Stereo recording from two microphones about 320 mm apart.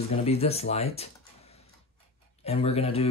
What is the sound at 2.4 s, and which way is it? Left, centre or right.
Speech, centre.